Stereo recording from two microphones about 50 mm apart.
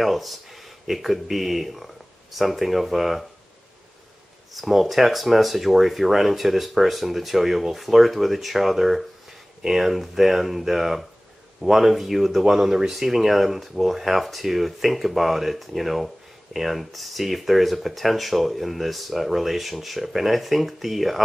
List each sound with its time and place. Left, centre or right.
0.0 s speech: centre
4.6 s speech: centre